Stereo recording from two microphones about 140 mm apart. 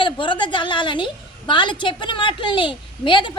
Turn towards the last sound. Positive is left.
turn(degrees=35)  # may be behind; listen again after turning